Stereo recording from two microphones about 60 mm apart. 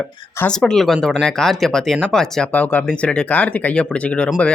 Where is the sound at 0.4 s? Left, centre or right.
Centre.